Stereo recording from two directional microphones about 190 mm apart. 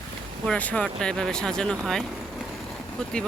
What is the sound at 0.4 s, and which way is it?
Speech, 5° left (ahead or behind).